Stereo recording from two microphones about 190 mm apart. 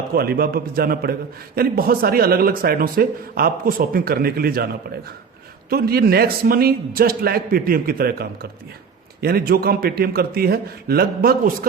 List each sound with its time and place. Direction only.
0.1 s a man's voice: 55° right (ahead or behind)